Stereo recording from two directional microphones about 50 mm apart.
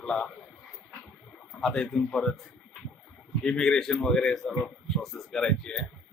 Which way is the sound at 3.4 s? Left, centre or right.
Centre.